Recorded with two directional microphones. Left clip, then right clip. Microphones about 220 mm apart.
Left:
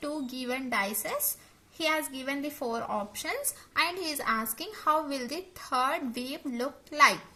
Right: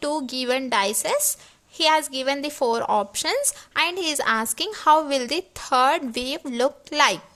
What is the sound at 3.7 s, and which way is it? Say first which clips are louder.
A woman's voice: right 7 dB; 35° right (ahead or behind).